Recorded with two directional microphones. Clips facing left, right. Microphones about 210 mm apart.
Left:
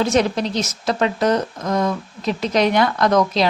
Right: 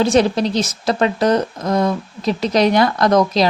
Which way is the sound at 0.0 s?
30° right (ahead or behind).